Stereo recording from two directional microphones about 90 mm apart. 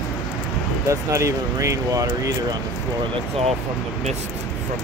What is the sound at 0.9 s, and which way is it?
Speech, 35° right (ahead or behind).